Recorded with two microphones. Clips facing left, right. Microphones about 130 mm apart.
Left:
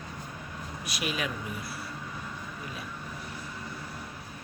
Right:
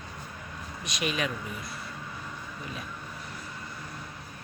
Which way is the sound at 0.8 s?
5° left (ahead or behind).